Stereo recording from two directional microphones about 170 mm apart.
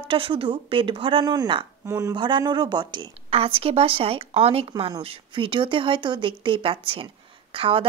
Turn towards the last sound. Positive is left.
turn(degrees=-30)  # may be behind; listen again after turning